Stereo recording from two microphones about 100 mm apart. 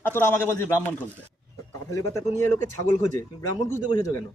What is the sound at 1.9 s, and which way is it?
Speech, 30° left (ahead or behind).